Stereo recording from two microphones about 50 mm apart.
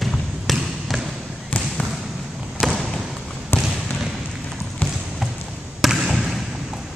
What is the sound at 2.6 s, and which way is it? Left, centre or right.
Basketball bounce, centre.